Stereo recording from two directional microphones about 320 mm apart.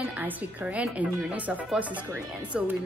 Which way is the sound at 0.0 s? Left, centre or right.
Centre.